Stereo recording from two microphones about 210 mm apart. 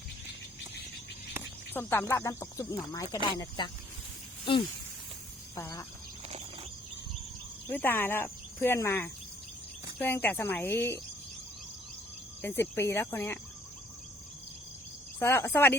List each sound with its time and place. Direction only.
1.7 s speech: 10° left (ahead or behind)
7.7 s speech: 10° left (ahead or behind)
12.4 s speech: 10° left (ahead or behind)
15.2 s speech: 10° left (ahead or behind)